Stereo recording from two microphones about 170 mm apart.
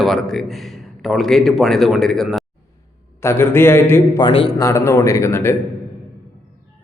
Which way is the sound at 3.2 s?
15° left (ahead or behind).